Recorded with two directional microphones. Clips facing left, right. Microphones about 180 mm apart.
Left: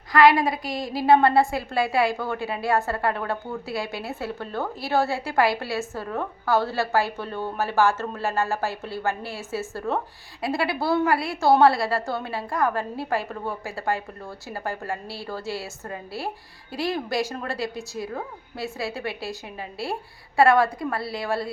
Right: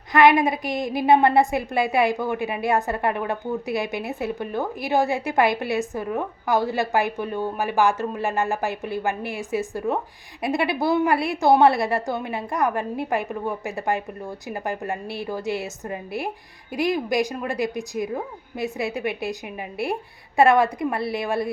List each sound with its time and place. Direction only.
0.1 s a woman's voice: 20° right (ahead or behind)